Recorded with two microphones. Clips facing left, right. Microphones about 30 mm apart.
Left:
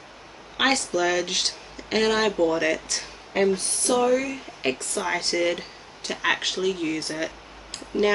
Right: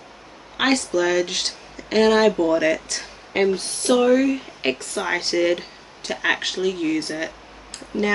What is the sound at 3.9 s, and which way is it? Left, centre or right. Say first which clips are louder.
Speech: right 5 dB; centre.